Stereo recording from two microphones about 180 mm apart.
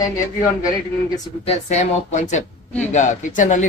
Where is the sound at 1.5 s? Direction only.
40° left (ahead or behind).